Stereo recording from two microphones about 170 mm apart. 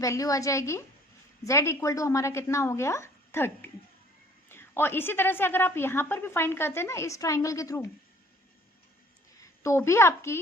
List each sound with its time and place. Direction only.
0.0 s a woman's voice: 20° left (ahead or behind)
9.4 s a woman's voice: 15° left (ahead or behind)